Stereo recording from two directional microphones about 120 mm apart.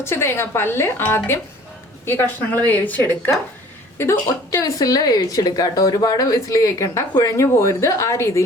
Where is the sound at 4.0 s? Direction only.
25° left (ahead or behind).